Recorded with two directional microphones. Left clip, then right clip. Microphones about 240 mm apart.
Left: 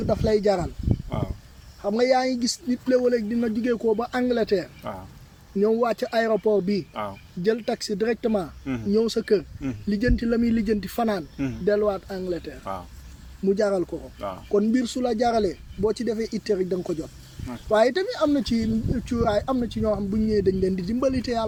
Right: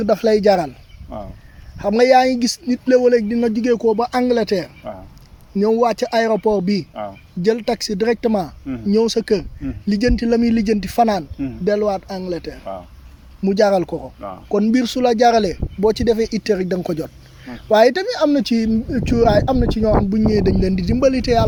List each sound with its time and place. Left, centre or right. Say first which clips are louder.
0.0 s speech: right 7 dB; right
1.1 s a sound: right 3 dB; left
1.8 s speech: right 9 dB; right
14.2 s speech: right 1 dB; left
14.5 s speech: right 5 dB; right